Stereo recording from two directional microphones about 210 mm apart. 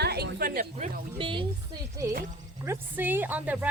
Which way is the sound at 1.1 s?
25° right (ahead or behind).